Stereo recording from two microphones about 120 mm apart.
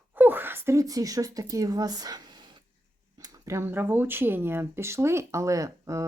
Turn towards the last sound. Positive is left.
turn(degrees=-25)  # may be behind; listen again after turning